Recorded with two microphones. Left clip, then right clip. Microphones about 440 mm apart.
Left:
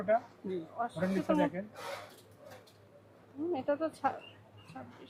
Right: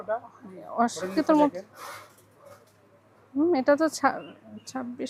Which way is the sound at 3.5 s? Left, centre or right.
Right.